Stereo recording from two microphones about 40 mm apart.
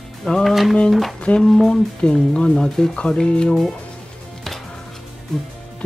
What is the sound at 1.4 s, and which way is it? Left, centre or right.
Speech, centre.